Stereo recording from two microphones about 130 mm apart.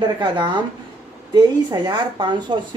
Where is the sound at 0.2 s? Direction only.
35° right (ahead or behind).